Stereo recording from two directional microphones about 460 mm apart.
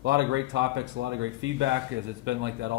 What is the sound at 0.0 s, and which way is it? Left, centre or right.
Speech, right.